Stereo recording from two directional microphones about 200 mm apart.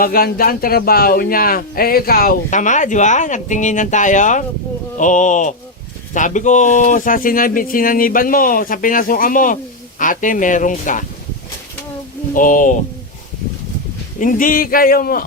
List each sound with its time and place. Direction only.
0.0 s speech: 50° left (ahead or behind)
12.3 s speech: 40° left (ahead or behind)
14.2 s speech: 40° left (ahead or behind)